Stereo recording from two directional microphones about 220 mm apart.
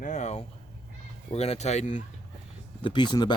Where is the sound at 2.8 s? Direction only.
20° left (ahead or behind).